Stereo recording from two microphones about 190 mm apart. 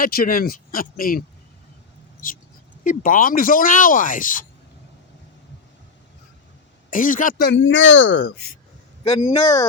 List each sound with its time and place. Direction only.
0.0 s speech: 50° left (ahead or behind)
2.8 s speech: 45° left (ahead or behind)
6.9 s speech: 45° left (ahead or behind); by 8.4 s 70° left (ahead or behind)
9.0 s speech: 30° left (ahead or behind)